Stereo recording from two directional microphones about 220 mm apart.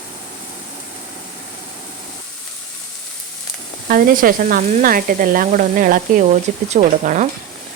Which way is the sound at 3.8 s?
40° right (ahead or behind).